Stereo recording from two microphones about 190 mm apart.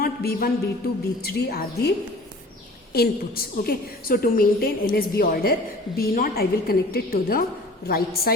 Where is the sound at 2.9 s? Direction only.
55° left (ahead or behind).